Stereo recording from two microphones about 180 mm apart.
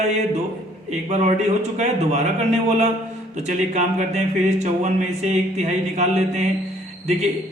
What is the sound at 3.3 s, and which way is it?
A man's voice, 40° right (ahead or behind).